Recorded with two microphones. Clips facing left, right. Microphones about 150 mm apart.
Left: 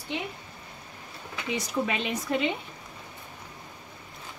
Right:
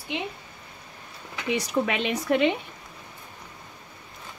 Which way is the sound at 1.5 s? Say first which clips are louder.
Right 4 dB; 65° right (ahead or behind).